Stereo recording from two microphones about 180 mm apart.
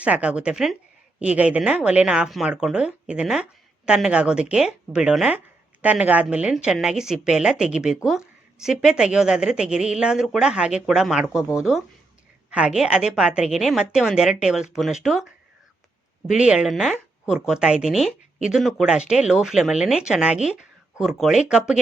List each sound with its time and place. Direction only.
0.0 s speech: 5° right (ahead or behind)